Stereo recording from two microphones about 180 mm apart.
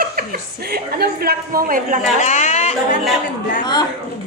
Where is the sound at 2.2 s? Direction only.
40° left (ahead or behind).